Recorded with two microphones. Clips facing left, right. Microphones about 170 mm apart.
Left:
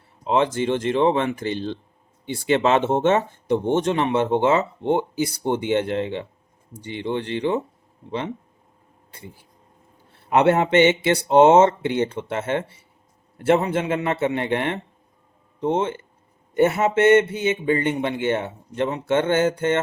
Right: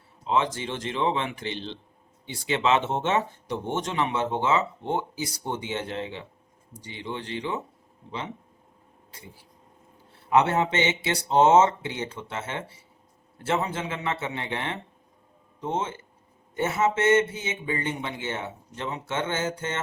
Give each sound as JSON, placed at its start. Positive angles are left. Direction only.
{"t": 0.3, "sound": "speech", "side_deg": 55}
{"t": 10.2, "sound": "speech", "side_deg": 60}